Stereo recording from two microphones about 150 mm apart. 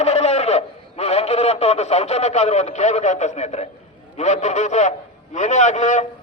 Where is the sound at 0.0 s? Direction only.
45° left (ahead or behind).